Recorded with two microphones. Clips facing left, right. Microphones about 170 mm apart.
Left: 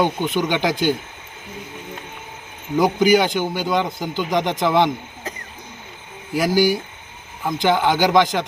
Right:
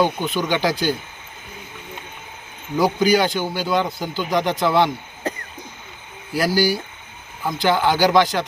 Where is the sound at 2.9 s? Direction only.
20° left (ahead or behind).